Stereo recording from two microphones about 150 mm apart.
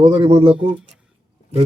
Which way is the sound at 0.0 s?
40° right (ahead or behind).